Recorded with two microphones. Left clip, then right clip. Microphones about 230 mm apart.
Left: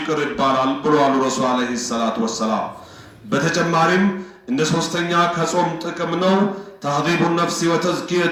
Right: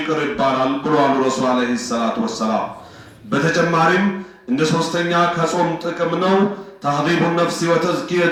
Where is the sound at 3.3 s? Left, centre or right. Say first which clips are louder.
Right 2 dB; left.